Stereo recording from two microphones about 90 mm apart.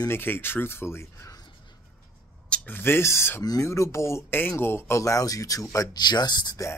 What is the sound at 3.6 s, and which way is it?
Speech, 30° left (ahead or behind).